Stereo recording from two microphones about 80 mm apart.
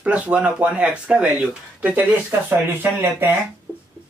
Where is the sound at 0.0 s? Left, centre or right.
Centre.